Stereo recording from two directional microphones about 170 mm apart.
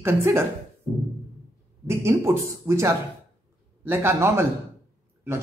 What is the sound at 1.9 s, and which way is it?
Speech, 15° right (ahead or behind).